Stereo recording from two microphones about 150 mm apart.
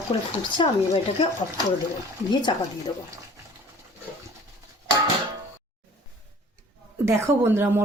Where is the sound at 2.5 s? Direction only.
35° left (ahead or behind).